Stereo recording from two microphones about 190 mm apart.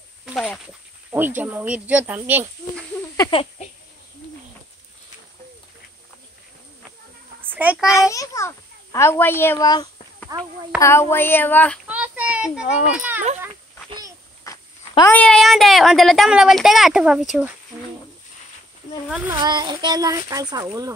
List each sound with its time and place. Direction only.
0.2 s speech: centre (ahead or behind)
3.2 s a sound: 25° left (ahead or behind)
7.4 s a sound: 10° right (ahead or behind)
7.8 s a child's voice: 15° left (ahead or behind)
10.3 s speech: 20° right (ahead or behind)
10.8 s a child's voice: 15° left (ahead or behind)
11.9 s child singing: 5° right (ahead or behind)
12.9 s a child's voice: 10° right (ahead or behind)
13.8 s a sound: 20° right (ahead or behind)
14.4 s speech: 15° left (ahead or behind); by 17.5 s 5° right (ahead or behind)
19.0 s speech: 5° right (ahead or behind)
19.3 s speech: 20° right (ahead or behind)